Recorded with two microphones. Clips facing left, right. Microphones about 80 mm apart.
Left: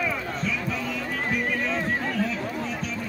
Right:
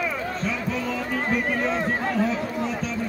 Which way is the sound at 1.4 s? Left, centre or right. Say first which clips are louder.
Right 2 dB; right.